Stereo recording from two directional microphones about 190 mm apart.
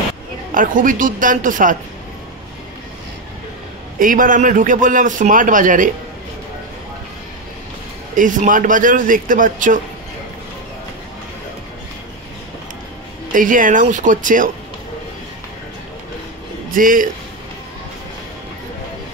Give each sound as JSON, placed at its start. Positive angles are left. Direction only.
{"t": 0.6, "sound": "a man's voice", "side_deg": -45}
{"t": 4.0, "sound": "a man's voice", "side_deg": -45}
{"t": 8.2, "sound": "a man's voice", "side_deg": -45}
{"t": 13.3, "sound": "a man's voice", "side_deg": -45}
{"t": 16.7, "sound": "a man's voice", "side_deg": -45}